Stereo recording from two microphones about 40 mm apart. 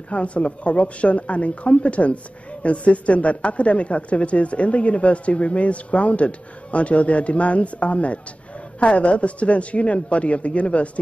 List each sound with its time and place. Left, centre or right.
0.1 s speech: left